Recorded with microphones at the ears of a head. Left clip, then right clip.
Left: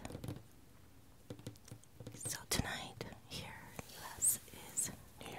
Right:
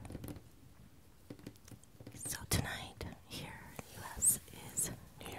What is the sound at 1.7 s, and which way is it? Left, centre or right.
Whispering, centre.